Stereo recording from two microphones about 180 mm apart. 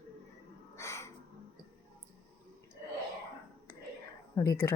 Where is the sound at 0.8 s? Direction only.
15° left (ahead or behind).